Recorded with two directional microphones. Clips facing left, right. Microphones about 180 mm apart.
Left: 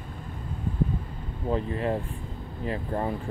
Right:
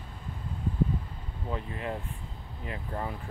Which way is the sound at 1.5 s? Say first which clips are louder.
Left 8 dB; 35° left (ahead or behind).